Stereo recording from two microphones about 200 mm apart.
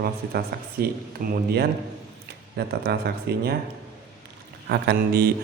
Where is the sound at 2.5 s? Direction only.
55° right (ahead or behind).